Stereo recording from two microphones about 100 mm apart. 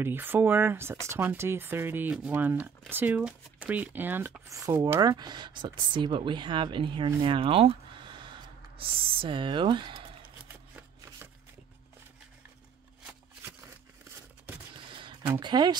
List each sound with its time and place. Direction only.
0.0 s speech: 20° right (ahead or behind)
4.5 s speech: 35° right (ahead or behind)
5.0 s speech: 45° right (ahead or behind)
10.5 s shuffling cards: 20° right (ahead or behind)
15.0 s a sound: 60° right (ahead or behind)
15.4 s speech: 45° right (ahead or behind)